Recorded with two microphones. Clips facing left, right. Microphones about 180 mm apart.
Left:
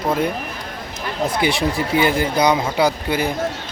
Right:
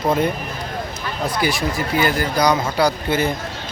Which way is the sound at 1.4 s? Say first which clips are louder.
Left 1 dB; 20° left (ahead or behind).